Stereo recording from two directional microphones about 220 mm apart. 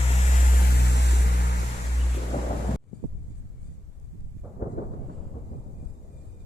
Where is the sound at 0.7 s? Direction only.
50° left (ahead or behind).